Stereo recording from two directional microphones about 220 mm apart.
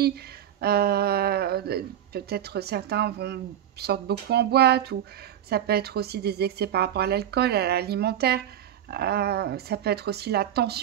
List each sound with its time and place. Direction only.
0.0 s speech: 45° right (ahead or behind)